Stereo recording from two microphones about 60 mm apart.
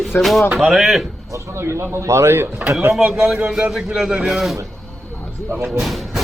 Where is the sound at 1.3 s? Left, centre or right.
Right.